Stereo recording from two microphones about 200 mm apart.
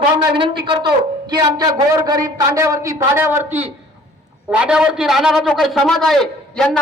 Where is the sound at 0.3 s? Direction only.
25° right (ahead or behind).